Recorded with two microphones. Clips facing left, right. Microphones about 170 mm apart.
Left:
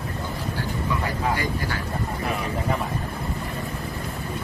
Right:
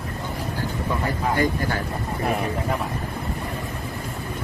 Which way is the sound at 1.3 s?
50° right (ahead or behind).